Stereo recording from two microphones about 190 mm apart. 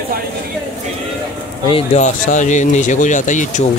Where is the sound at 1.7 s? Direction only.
35° left (ahead or behind).